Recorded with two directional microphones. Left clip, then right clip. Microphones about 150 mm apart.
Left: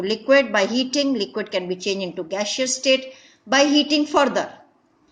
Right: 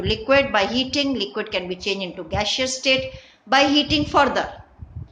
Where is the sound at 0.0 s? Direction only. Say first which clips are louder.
Left 1 dB; 45° left (ahead or behind).